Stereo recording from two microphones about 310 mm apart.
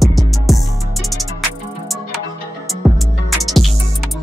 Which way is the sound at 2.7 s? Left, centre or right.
Centre.